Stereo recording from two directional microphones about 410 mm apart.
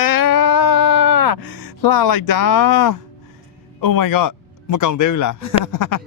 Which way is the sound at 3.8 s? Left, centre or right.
Left.